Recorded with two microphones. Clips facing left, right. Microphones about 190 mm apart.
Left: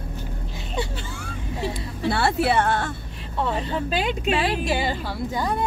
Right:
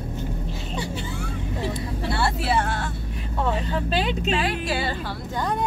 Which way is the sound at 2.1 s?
60° left (ahead or behind).